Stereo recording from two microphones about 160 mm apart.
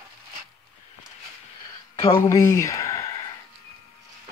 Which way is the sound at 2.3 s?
20° left (ahead or behind).